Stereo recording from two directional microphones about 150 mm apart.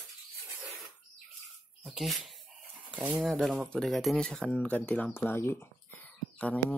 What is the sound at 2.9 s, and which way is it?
Speech, 5° right (ahead or behind).